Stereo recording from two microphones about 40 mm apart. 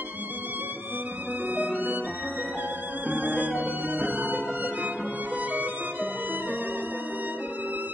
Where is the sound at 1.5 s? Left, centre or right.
Right.